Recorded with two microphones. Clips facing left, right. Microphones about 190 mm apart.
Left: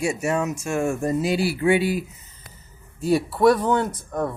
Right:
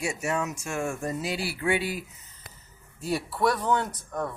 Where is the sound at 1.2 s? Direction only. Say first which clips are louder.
Left 9 dB; 15° left (ahead or behind).